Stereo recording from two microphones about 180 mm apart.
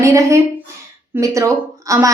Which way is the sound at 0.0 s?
15° right (ahead or behind).